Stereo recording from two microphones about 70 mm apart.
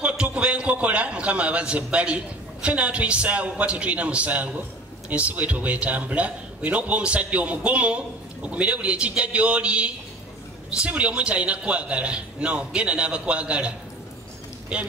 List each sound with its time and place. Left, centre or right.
0.0 s a man's voice: centre